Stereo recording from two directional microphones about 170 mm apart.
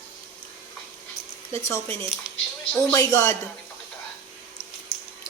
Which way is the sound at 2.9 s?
15° left (ahead or behind).